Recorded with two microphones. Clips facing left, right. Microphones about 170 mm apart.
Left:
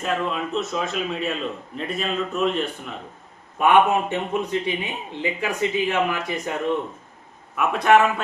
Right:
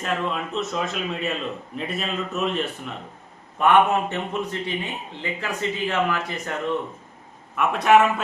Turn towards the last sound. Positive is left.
turn(degrees=0)  # may be behind; listen again after turning